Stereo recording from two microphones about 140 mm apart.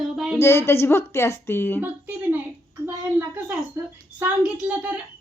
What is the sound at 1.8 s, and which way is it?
Speech, 15° right (ahead or behind).